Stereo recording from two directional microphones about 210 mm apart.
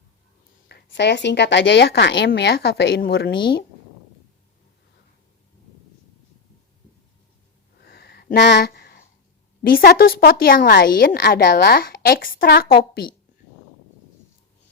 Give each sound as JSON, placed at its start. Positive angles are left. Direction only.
{"t": 0.7, "sound": "a woman's voice", "side_deg": 55}
{"t": 7.8, "sound": "a sound", "side_deg": 50}
{"t": 9.6, "sound": "a woman's voice", "side_deg": 45}